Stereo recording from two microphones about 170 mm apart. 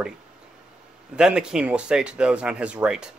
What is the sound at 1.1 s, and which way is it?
A man's voice, 5° right (ahead or behind).